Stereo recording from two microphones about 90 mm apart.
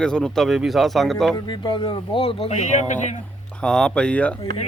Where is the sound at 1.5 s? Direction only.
60° left (ahead or behind); by 2.5 s 90° left.